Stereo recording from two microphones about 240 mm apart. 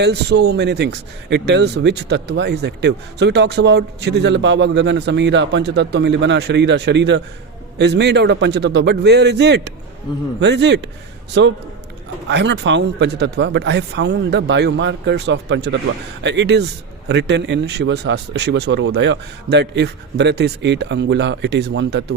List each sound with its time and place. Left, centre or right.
0.0 s speech: right